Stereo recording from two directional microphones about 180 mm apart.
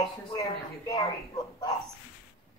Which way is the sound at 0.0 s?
20° left (ahead or behind).